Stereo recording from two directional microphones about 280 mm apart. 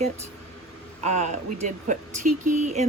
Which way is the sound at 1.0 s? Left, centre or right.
Right.